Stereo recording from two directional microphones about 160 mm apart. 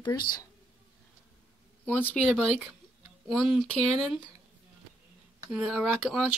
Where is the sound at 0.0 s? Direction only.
25° left (ahead or behind).